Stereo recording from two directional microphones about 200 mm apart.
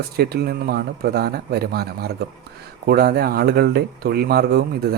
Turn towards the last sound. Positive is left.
turn(degrees=-50)  # may be behind; listen again after turning